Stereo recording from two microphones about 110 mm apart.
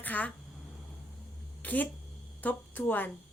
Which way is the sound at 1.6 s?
15° left (ahead or behind).